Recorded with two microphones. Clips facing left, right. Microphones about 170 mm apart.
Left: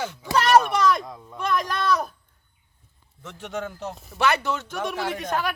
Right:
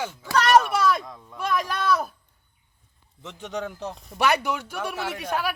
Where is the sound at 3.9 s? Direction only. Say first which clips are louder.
Left 1 dB; 5° left (ahead or behind).